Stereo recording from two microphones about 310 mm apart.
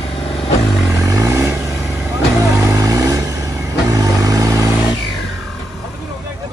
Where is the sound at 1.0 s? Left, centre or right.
Centre.